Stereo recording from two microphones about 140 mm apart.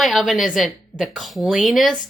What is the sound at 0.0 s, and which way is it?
A woman's voice, centre (ahead or behind).